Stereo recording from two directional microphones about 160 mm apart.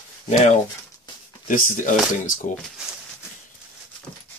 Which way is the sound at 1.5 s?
55° left (ahead or behind).